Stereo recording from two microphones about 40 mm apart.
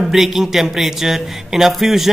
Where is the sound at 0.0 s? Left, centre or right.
Centre.